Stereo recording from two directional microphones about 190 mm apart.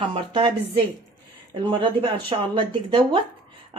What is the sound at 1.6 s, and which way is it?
Speech, 25° right (ahead or behind).